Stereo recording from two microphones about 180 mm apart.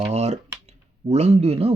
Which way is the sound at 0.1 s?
40° right (ahead or behind).